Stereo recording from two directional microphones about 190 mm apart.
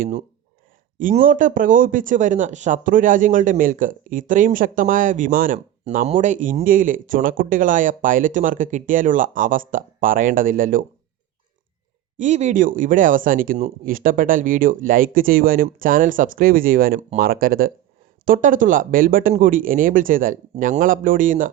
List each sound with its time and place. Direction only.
0.0 s speech: 35° right (ahead or behind)
12.1 s speech: 40° right (ahead or behind)